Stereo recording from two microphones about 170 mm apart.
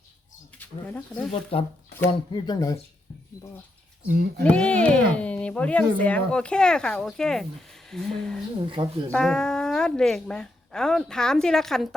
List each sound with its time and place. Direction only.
0.6 s speech: 10° left (ahead or behind)
1.3 s speech: 35° left (ahead or behind)
2.3 s speech: 20° left (ahead or behind)
4.0 s speech: 70° right (ahead or behind)
4.4 s speech: 5° left (ahead or behind)
8.8 s speech: 30° right (ahead or behind)
9.1 s speech: 5° left (ahead or behind)